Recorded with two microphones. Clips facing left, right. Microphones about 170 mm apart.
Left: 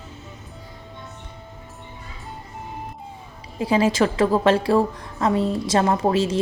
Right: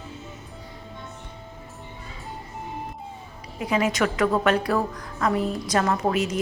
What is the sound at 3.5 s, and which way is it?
A woman's voice, 30° left (ahead or behind).